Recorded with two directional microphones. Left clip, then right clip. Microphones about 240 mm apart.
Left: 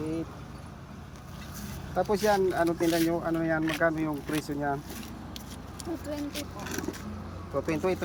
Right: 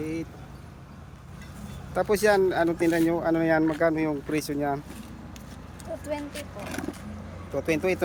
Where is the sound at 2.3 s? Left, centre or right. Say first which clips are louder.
Right 3 dB; right.